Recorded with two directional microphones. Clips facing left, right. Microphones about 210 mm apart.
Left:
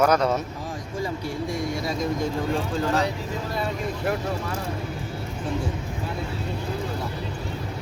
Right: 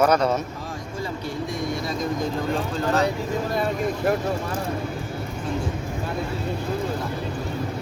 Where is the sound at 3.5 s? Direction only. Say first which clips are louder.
Right 3 dB; 45° right (ahead or behind).